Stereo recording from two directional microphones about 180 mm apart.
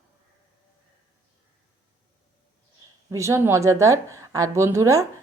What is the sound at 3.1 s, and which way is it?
Speech, 15° right (ahead or behind).